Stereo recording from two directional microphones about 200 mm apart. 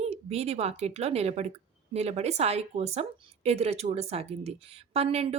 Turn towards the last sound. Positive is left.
turn(degrees=-30)  # may be behind; listen again after turning